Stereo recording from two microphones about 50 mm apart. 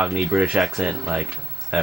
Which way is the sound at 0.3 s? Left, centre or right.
Right.